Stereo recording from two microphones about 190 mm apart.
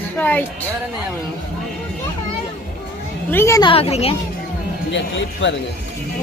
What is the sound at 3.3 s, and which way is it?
Speech, 15° left (ahead or behind).